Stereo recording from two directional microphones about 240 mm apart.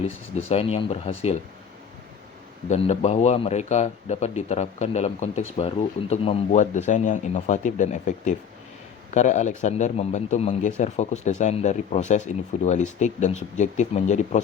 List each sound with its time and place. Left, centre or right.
0.4 s speech: left
2.6 s speech: left